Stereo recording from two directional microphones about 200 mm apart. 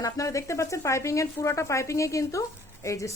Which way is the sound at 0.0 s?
15° left (ahead or behind).